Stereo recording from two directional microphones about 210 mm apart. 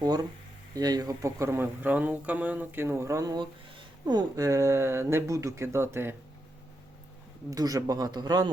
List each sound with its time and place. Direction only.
0.0 s a sound: 20° right (ahead or behind)
0.8 s speech: 20° right (ahead or behind)
7.5 s speech: 15° right (ahead or behind)